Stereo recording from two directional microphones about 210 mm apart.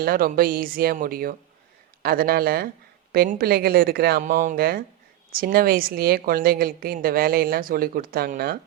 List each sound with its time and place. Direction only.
0.0 s a woman's voice: 45° right (ahead or behind)